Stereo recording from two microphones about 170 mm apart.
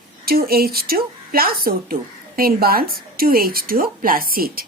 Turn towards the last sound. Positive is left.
turn(degrees=-60)  # may be behind; listen again after turning